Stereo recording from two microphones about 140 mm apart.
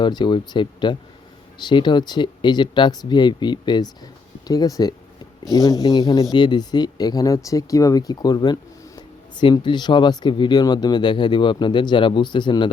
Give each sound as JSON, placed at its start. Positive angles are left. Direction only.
{"t": 0.0, "sound": "speech", "side_deg": 30}